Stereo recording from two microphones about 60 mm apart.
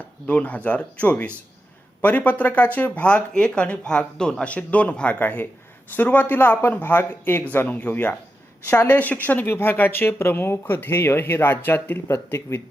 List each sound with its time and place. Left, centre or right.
0.3 s speech: left
5.2 s speech: left
7.4 s speech: left